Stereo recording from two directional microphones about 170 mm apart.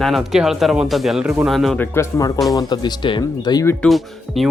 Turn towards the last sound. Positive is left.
turn(degrees=0)  # may be behind; listen again after turning